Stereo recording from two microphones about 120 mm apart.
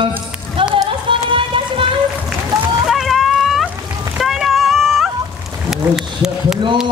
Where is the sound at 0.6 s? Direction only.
45° right (ahead or behind).